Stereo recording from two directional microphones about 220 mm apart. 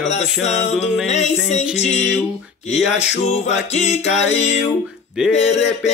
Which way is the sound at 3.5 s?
30° left (ahead or behind).